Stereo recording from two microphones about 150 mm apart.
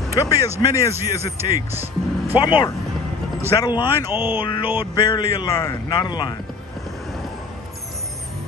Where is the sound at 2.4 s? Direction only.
30° left (ahead or behind).